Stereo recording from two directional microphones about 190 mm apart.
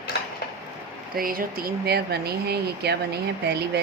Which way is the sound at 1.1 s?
50° right (ahead or behind).